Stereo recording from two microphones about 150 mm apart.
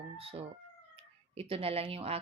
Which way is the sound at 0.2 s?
40° right (ahead or behind).